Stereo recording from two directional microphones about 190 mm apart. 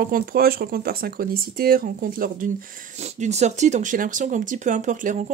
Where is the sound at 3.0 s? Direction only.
35° right (ahead or behind).